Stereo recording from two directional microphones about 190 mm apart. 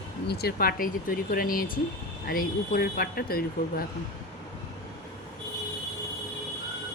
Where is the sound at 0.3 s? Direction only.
55° left (ahead or behind).